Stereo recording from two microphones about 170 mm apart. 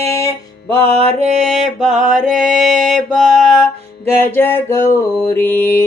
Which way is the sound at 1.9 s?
45° right (ahead or behind).